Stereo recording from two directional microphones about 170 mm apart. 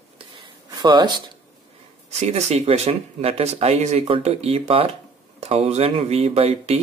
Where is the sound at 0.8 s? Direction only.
25° right (ahead or behind).